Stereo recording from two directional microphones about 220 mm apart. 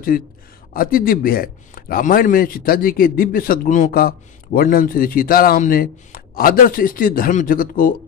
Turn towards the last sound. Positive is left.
turn(degrees=40)  # may be behind; listen again after turning